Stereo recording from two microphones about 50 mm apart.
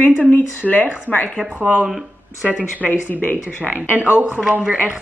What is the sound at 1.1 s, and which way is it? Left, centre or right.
Speech, centre.